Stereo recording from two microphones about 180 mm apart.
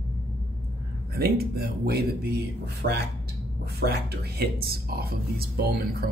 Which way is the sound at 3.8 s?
65° right (ahead or behind).